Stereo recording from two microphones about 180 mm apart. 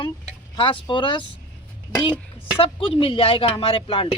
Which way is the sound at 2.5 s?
30° left (ahead or behind).